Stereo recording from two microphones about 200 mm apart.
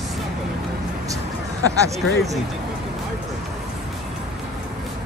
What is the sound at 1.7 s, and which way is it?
Speech, 15° right (ahead or behind).